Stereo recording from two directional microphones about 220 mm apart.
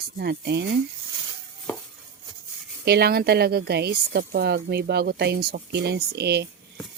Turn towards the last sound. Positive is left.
turn(degrees=-50)  # may be behind; listen again after turning